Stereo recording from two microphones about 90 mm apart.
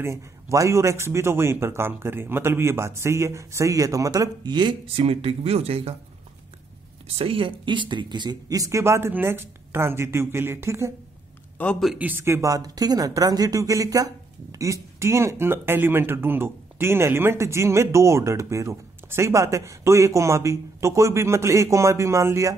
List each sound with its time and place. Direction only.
0.0 s speech: 35° right (ahead or behind); by 5.9 s 90° right
7.2 s a woman's voice: 75° right (ahead or behind); by 10.9 s 30° right (ahead or behind)
11.5 s a sound: 15° left (ahead or behind)
12.0 s a woman's voice: 25° right (ahead or behind)
12.4 s speech: 40° right (ahead or behind)